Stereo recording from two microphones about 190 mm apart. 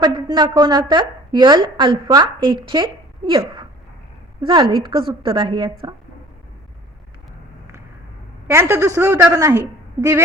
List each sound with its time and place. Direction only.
0.0 s a woman's voice: 20° right (ahead or behind)
8.4 s a woman's voice: 15° right (ahead or behind)